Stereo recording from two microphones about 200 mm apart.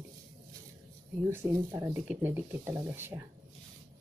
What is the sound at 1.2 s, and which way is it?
Speech, 15° right (ahead or behind).